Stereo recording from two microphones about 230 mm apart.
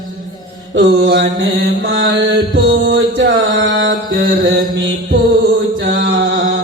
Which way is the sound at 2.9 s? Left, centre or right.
Right.